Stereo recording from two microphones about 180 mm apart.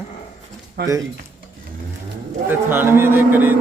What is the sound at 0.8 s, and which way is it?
Speech, 70° right (ahead or behind).